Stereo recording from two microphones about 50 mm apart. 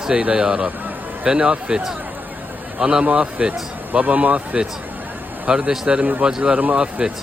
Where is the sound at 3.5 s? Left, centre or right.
Right.